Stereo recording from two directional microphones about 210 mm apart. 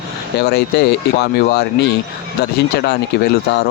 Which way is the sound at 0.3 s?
50° left (ahead or behind).